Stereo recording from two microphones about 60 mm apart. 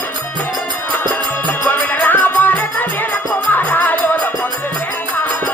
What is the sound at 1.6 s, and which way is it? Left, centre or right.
Music, left.